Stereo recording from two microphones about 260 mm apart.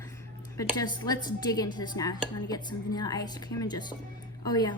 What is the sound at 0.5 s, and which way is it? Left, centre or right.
Speech, centre.